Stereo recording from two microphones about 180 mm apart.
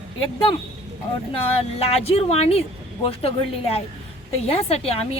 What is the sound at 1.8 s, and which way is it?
A woman's voice, 35° left (ahead or behind).